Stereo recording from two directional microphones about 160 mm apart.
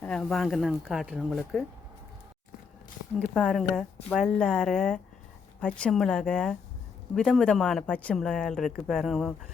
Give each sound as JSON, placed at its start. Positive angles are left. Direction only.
{"t": 0.0, "sound": "speech", "side_deg": 5}
{"t": 3.2, "sound": "speech", "side_deg": 5}